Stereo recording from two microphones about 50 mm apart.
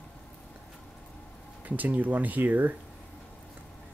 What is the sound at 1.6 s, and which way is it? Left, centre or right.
Speech, right.